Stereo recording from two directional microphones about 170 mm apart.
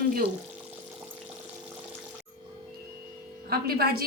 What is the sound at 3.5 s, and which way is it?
Speech, 65° right (ahead or behind).